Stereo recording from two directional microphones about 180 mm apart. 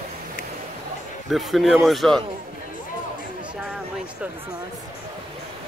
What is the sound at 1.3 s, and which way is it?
Speech, centre (ahead or behind).